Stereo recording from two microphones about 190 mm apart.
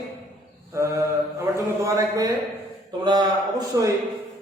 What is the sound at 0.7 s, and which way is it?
A man's voice, 15° right (ahead or behind).